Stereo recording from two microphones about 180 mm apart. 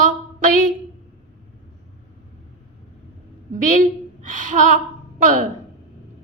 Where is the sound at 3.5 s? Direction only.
45° right (ahead or behind).